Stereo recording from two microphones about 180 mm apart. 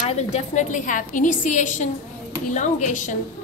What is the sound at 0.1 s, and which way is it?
A woman's voice, 40° left (ahead or behind).